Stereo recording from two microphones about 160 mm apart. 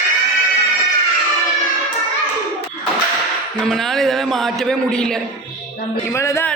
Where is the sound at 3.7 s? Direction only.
Centre (ahead or behind).